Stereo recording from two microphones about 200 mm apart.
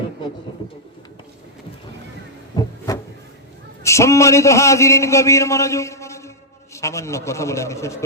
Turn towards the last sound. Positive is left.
turn(degrees=15)  # may be behind; listen again after turning